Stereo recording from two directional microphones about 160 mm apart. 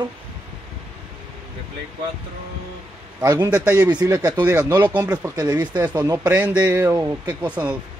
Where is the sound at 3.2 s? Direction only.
20° right (ahead or behind).